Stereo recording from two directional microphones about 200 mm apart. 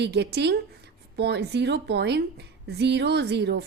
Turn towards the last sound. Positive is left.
turn(degrees=-55)  # may be behind; listen again after turning